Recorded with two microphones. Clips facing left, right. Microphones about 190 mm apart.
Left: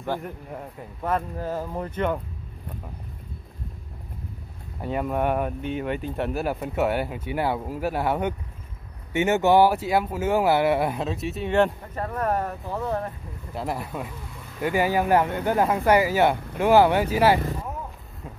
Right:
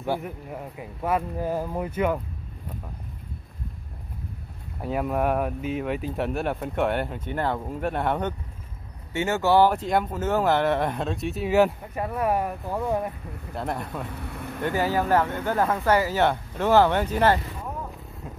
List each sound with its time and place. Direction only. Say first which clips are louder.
0.0 s speech: right 1 dB; 5° right (ahead or behind)
4.8 s speech: even; centre (ahead or behind)
9.1 s speech: left 2 dB; 20° left (ahead or behind); by 13.1 s 10° right (ahead or behind)
13.6 s speech: left 1 dB; 5° left (ahead or behind)
14.0 s speech: right 5 dB; 65° right (ahead or behind)
14.6 s speech: left 2 dB; 15° left (ahead or behind)
18.2 s a sound: even; centre (ahead or behind)